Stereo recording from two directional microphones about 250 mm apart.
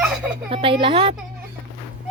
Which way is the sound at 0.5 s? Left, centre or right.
Right.